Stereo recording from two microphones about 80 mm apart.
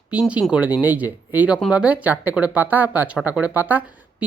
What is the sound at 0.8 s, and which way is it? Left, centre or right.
Speech, right.